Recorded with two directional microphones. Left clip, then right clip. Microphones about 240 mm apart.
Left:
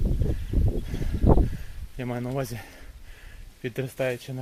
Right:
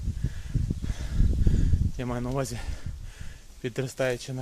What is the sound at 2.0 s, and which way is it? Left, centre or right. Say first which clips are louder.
Speech: left 1 dB; centre.